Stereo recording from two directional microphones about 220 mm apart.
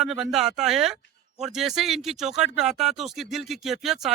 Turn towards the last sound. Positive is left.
turn(degrees=0)  # may be behind; listen again after turning